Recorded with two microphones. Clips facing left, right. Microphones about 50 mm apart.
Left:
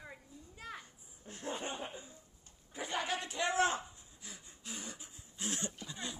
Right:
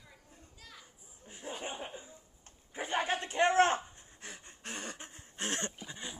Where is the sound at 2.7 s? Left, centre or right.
Right.